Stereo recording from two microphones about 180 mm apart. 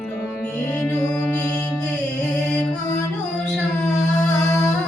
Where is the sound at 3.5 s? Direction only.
Centre (ahead or behind).